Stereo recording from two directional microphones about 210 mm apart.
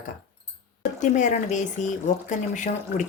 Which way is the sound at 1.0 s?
35° left (ahead or behind).